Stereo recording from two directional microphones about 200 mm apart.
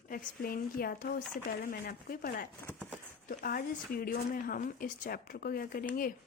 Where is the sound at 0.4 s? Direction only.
45° left (ahead or behind).